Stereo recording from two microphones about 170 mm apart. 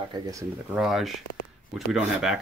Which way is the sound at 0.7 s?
Centre (ahead or behind).